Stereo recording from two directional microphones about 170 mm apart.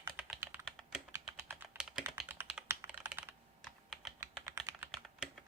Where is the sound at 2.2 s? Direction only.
10° right (ahead or behind).